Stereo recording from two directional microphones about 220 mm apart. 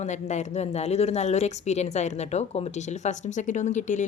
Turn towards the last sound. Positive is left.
turn(degrees=35)  # may be behind; listen again after turning